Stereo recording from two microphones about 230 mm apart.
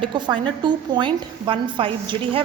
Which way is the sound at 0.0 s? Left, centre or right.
Centre.